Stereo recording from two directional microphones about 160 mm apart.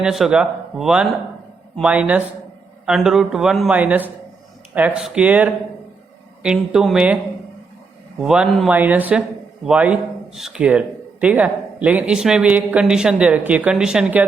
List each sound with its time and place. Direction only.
0.0 s a man's voice: 5° right (ahead or behind)
8.2 s a man's voice: 5° right (ahead or behind)